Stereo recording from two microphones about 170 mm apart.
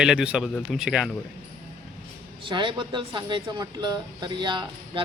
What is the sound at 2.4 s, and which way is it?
Speech, 30° right (ahead or behind).